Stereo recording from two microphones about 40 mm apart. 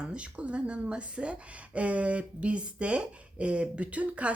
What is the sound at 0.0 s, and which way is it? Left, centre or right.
Speech, right.